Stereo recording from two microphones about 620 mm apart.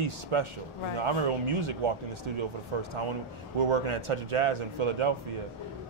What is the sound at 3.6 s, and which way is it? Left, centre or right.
Speech, right.